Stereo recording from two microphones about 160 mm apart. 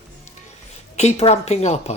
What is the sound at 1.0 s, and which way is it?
Speech, 40° left (ahead or behind).